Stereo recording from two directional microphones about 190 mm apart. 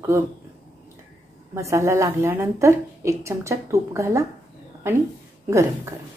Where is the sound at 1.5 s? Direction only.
15° right (ahead or behind).